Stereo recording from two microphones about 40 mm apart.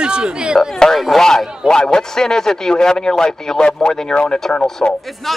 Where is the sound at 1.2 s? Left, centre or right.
Centre.